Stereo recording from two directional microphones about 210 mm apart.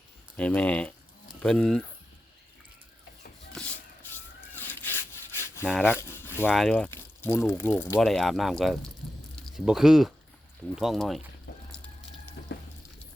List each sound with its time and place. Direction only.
0.3 s speech: 5° left (ahead or behind)
3.6 s shuffle: centre (ahead or behind)
4.1 s rub: 10° left (ahead or behind)
9.6 s speech: centre (ahead or behind)
12.4 s a sound: 50° left (ahead or behind)